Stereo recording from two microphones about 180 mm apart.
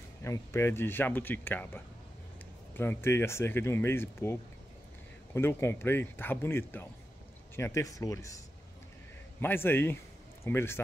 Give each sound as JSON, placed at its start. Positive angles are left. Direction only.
{"t": 0.2, "sound": "speech", "side_deg": 15}
{"t": 9.4, "sound": "speech", "side_deg": 10}